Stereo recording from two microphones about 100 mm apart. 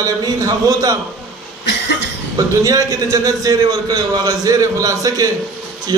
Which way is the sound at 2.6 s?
35° right (ahead or behind).